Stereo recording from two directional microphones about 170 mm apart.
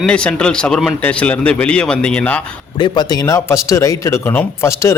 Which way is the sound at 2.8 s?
25° left (ahead or behind).